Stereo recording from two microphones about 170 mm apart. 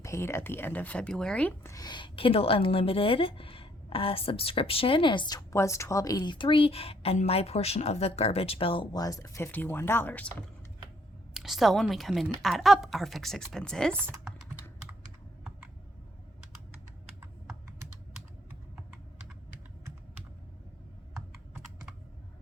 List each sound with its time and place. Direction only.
0.0 s speech: 15° left (ahead or behind)
1.7 s a woman's voice: 25° left (ahead or behind)
11.3 s a woman's voice: centre (ahead or behind)